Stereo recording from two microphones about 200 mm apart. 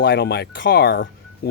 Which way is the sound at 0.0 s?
55° left (ahead or behind).